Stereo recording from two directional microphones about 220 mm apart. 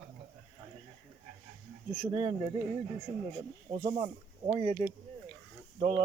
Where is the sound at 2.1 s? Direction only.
25° right (ahead or behind).